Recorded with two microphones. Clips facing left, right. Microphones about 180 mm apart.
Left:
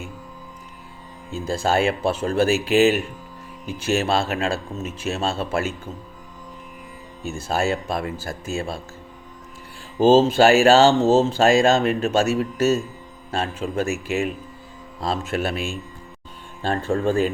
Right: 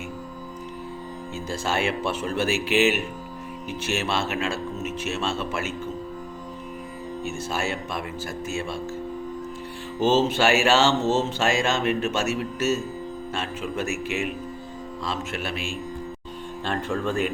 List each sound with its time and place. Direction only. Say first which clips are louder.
1.5 s speech: left 6 dB; 35° left (ahead or behind)
4.0 s speech: left 4 dB; 35° left (ahead or behind)
7.3 s speech: left 6 dB; 35° left (ahead or behind)
10.4 s speech: left 7 dB; 35° left (ahead or behind)
16.6 s speech: left 5 dB; 40° left (ahead or behind)